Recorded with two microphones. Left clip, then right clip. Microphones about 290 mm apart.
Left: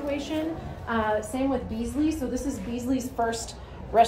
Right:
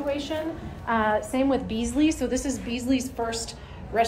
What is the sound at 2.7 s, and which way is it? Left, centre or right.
Speech, centre.